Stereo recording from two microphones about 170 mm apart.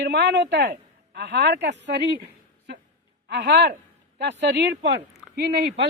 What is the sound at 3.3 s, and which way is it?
Speech, 85° right.